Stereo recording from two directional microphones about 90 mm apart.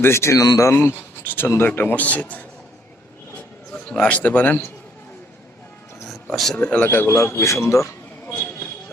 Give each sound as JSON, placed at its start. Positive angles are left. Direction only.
{"t": 0.0, "sound": "speech", "side_deg": 30}
{"t": 0.4, "sound": "speech", "side_deg": 45}
{"t": 0.7, "sound": "speech", "side_deg": 25}
{"t": 3.7, "sound": "a man's voice", "side_deg": 10}
{"t": 6.3, "sound": "speech", "side_deg": 0}
{"t": 6.6, "sound": "speech", "side_deg": 15}
{"t": 8.3, "sound": "a sound", "side_deg": 25}